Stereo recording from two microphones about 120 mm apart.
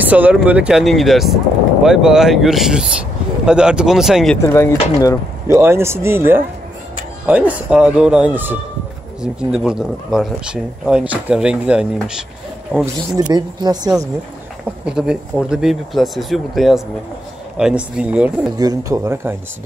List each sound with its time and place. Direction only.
0.0 s speech: 10° right (ahead or behind)
4.5 s speech: 25° left (ahead or behind)
5.5 s speech: 20° right (ahead or behind)
13.1 s speech: 35° right (ahead or behind)
14.9 s speech: 5° right (ahead or behind)
18.6 s speech: 30° right (ahead or behind)